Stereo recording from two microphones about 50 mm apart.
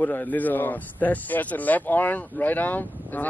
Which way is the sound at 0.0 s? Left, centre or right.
Left.